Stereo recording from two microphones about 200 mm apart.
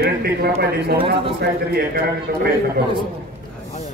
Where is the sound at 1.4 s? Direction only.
50° right (ahead or behind).